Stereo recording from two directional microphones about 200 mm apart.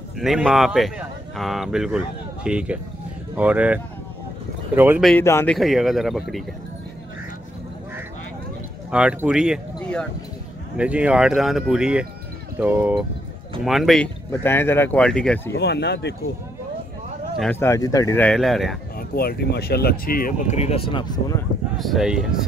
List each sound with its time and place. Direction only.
0.2 s speech: centre (ahead or behind)
5.0 s speech: 10° left (ahead or behind)
5.6 s speech: centre (ahead or behind)
8.9 s speech: 5° right (ahead or behind)
10.8 s speech: 5° right (ahead or behind)
15.5 s speech: 55° left (ahead or behind)
17.4 s speech: 10° left (ahead or behind)
18.9 s speech: 50° left (ahead or behind); by 21.4 s 25° left (ahead or behind)
21.7 s speech: centre (ahead or behind)